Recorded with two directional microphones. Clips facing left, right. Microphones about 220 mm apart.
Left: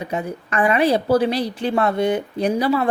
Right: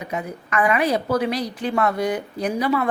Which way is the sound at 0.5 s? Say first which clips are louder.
Left 3 dB; 30° left (ahead or behind).